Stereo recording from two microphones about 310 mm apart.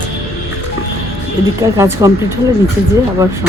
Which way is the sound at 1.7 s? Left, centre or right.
Centre.